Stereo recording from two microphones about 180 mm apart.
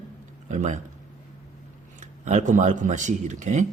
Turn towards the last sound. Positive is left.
turn(degrees=-45)  # may be behind; listen again after turning